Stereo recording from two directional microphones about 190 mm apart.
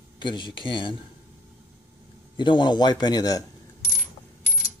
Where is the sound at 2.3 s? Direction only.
25° left (ahead or behind).